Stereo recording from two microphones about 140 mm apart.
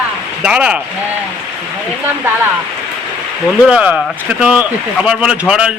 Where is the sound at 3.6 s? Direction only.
10° right (ahead or behind).